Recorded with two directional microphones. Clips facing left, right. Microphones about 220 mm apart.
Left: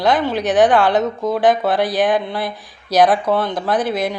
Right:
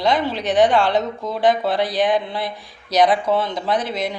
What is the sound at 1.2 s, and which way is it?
Speech, 50° left (ahead or behind).